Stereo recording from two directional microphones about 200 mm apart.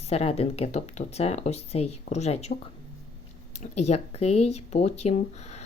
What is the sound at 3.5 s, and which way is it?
Speech, 35° left (ahead or behind).